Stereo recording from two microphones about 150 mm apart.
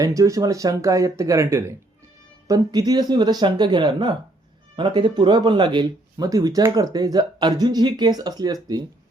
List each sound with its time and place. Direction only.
0.0 s speech: 20° right (ahead or behind)